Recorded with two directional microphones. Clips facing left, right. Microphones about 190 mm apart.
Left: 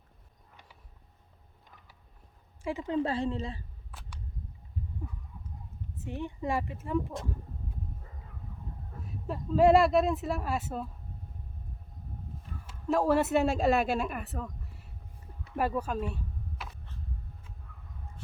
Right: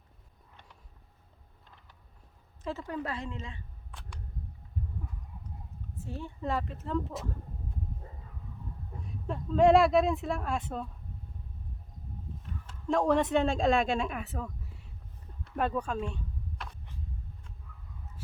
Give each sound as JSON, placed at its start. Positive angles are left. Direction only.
{"t": 2.6, "sound": "a woman's voice", "side_deg": 20}
{"t": 3.9, "sound": "single-lens reflex camera", "side_deg": 5}
{"t": 6.0, "sound": "a woman's voice", "side_deg": 20}
{"t": 9.0, "sound": "speech", "side_deg": 5}
{"t": 12.9, "sound": "speech", "side_deg": 5}
{"t": 15.4, "sound": "a sound", "side_deg": 5}